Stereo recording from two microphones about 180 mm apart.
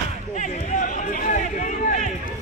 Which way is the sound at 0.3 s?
45° left (ahead or behind).